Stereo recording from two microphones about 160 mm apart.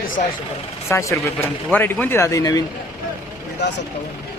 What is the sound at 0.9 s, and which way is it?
A man's voice, 20° left (ahead or behind).